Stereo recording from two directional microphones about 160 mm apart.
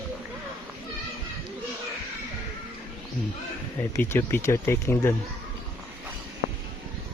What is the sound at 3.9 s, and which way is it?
Speech, 15° left (ahead or behind).